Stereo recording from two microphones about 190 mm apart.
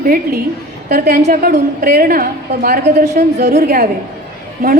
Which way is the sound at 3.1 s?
60° right (ahead or behind).